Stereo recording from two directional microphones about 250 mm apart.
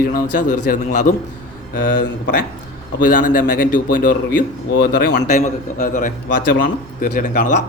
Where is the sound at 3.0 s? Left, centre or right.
Left.